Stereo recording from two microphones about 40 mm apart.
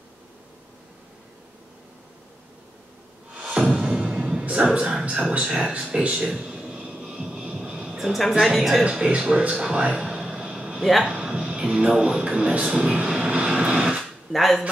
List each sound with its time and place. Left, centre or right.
3.8 s music: right
5.0 s speech: right
6.3 s a sound: centre
7.0 s music: centre
7.5 s a sound: centre
8.2 s a woman's voice: centre
8.8 s speech: right
10.8 s speech: centre
11.1 s a man's voice: right
13.3 s vehicle: right
14.3 s a woman's voice: centre